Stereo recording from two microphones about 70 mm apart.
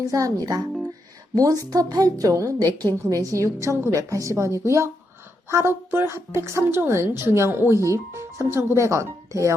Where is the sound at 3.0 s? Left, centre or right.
Right.